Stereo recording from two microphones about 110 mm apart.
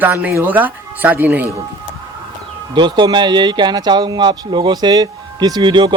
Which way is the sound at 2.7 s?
45° right (ahead or behind).